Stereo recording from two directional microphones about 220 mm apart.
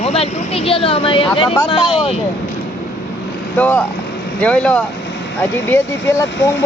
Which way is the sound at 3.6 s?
5° left (ahead or behind).